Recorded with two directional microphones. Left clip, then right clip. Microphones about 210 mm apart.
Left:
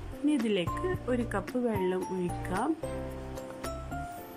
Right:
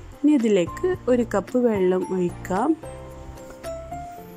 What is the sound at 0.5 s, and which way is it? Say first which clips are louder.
A woman's voice: right 9 dB; 20° right (ahead or behind).